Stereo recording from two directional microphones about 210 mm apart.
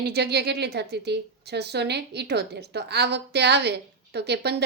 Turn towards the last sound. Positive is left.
turn(degrees=-50)  # may be behind; listen again after turning